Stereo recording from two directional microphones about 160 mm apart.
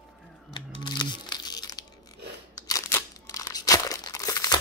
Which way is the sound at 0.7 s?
25° left (ahead or behind).